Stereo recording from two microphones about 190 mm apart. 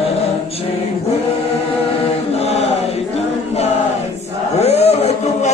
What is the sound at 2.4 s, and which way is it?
Chant, 35° left (ahead or behind).